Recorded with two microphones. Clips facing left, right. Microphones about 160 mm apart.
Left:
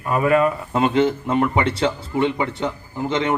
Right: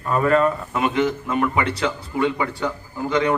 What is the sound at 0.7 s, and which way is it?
A man's voice, 30° left (ahead or behind).